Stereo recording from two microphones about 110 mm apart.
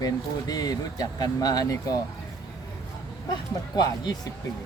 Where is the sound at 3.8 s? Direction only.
40° left (ahead or behind).